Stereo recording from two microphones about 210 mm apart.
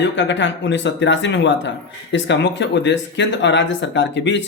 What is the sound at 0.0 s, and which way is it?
Speech, 60° left (ahead or behind).